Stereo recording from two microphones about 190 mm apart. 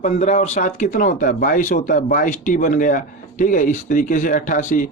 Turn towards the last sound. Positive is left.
turn(degrees=45)  # may be behind; listen again after turning